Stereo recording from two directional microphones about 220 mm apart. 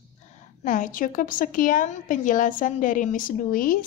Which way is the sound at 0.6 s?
35° left (ahead or behind).